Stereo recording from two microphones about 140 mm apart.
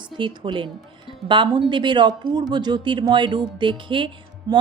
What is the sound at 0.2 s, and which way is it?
Speech, 35° right (ahead or behind).